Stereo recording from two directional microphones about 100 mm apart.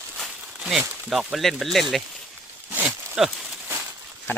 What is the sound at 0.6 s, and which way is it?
Speech, 5° right (ahead or behind).